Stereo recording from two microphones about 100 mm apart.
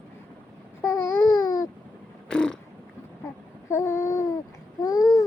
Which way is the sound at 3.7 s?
30° left (ahead or behind).